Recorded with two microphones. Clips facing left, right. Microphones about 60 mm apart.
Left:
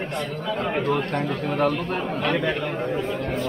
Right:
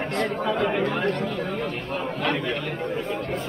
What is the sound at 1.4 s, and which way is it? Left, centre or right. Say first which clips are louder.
Speech: left 7 dB; left.